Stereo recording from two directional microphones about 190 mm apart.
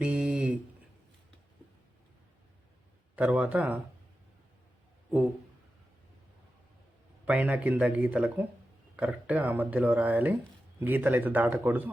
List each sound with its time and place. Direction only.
0.0 s a sound: 5° right (ahead or behind)
3.2 s speech: 5° right (ahead or behind)
7.3 s speech: 5° right (ahead or behind)